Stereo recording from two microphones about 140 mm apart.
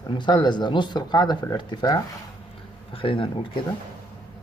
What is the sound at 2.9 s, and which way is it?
Speech, 40° left (ahead or behind).